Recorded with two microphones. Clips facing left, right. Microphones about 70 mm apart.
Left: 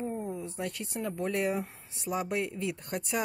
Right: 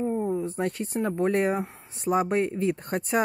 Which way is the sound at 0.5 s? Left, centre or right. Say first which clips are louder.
Right 8 dB; right.